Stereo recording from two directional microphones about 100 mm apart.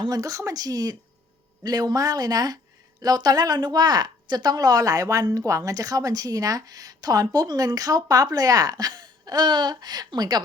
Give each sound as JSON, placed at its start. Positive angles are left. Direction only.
{"t": 0.0, "sound": "a woman's voice", "side_deg": -40}